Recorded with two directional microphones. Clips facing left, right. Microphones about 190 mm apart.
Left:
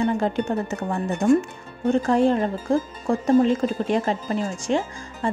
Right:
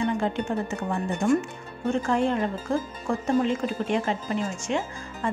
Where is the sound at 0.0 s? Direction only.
40° left (ahead or behind).